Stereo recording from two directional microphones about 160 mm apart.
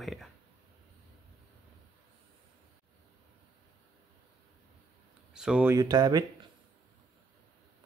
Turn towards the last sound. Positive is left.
turn(degrees=-25)  # may be behind; listen again after turning